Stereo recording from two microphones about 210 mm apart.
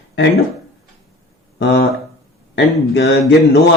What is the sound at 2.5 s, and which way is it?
Speech, 55° left (ahead or behind).